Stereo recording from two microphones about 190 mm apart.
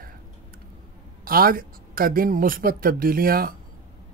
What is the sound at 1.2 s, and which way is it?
Speech, 50° right (ahead or behind).